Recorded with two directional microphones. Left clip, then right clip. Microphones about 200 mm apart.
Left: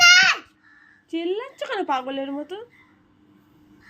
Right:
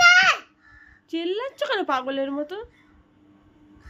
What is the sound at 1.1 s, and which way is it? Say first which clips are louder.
A child's voice: even; 15° right (ahead or behind).